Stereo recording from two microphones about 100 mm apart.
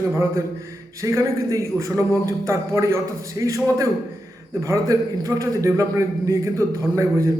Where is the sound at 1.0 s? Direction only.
30° right (ahead or behind).